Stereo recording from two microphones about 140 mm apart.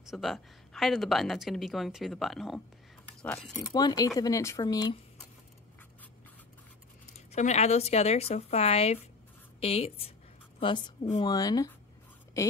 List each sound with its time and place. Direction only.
0.1 s a woman's voice: centre (ahead or behind)
3.5 s speech: 25° left (ahead or behind)
7.2 s a woman's voice: 55° left (ahead or behind); by 11.1 s 35° left (ahead or behind)
11.1 s speech: 25° left (ahead or behind)